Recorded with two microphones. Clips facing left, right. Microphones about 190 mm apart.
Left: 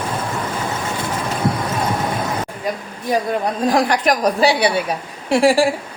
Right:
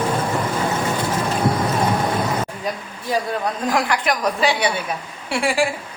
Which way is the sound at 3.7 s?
35° left (ahead or behind).